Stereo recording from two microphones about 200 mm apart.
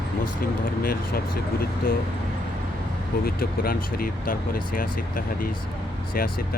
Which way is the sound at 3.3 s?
45° left (ahead or behind).